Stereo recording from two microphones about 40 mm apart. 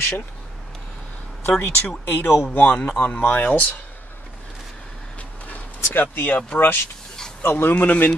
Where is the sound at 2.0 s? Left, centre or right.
Left.